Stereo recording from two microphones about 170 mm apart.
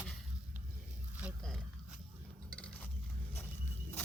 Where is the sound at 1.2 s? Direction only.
Centre (ahead or behind).